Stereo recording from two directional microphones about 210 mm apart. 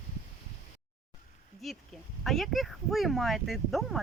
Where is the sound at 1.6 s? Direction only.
Centre (ahead or behind).